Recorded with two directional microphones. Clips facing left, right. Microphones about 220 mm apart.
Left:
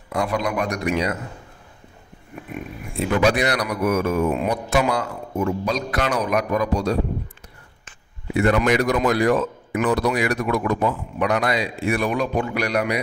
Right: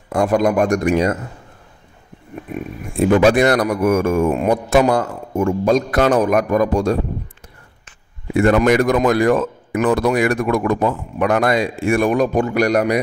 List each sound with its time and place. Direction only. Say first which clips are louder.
0.1 s speech: right 8 dB; 45° right (ahead or behind)
3.0 s speech: right 7 dB; 50° right (ahead or behind)
8.4 s speech: right 5 dB; 50° right (ahead or behind)